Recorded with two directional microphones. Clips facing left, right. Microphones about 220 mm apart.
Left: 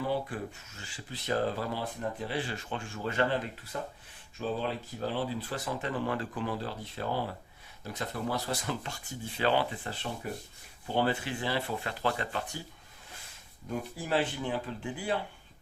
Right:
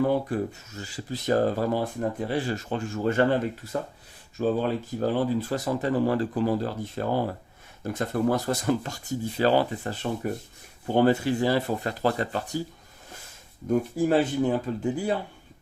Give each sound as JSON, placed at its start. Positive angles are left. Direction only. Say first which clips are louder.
{"t": 0.0, "sound": "speech", "louder": "right 8 dB", "side_deg": -50}
{"t": 13.7, "sound": "speech", "louder": "right 11 dB", "side_deg": -45}